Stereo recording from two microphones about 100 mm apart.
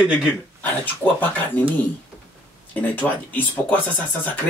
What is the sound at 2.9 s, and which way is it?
Speech, 15° left (ahead or behind).